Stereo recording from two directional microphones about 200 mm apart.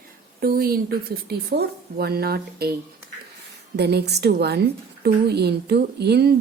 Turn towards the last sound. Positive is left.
turn(degrees=-55)  # may be behind; listen again after turning